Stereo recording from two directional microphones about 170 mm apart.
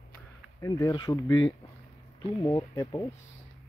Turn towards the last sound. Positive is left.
turn(degrees=20)  # may be behind; listen again after turning